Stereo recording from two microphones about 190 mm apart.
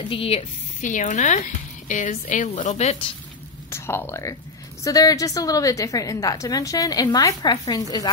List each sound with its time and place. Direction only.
0.1 s speech: 30° left (ahead or behind)
3.7 s a woman's voice: 15° left (ahead or behind)